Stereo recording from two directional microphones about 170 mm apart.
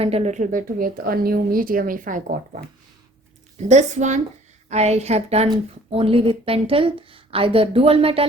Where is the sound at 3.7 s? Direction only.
45° right (ahead or behind).